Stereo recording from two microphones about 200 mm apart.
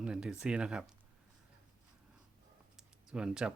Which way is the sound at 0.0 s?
5° right (ahead or behind).